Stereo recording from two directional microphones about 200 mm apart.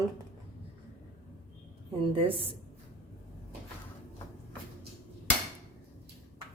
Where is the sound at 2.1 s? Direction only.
25° right (ahead or behind).